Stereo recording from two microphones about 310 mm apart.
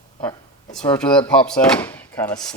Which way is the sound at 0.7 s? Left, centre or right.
Centre.